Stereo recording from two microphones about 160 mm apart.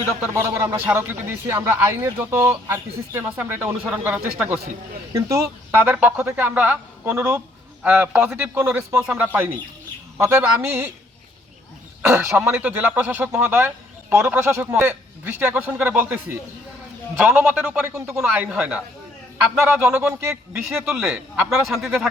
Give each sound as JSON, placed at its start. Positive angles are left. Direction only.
{"t": 0.3, "sound": "a man's voice", "side_deg": -15}
{"t": 12.0, "sound": "a man's voice", "side_deg": -10}
{"t": 20.7, "sound": "speech", "side_deg": 0}